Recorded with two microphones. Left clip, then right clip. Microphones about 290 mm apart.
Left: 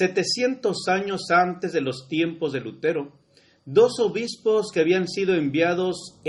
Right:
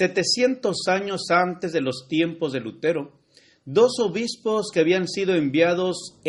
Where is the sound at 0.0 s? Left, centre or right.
Right.